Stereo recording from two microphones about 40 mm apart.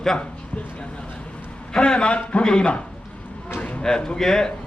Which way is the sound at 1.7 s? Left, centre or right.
Left.